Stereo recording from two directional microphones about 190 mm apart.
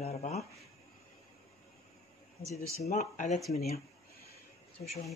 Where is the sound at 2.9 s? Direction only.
40° left (ahead or behind).